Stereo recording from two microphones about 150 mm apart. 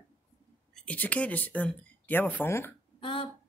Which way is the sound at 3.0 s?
35° left (ahead or behind).